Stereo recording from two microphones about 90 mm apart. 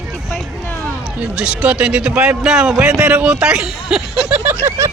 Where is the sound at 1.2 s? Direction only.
10° right (ahead or behind).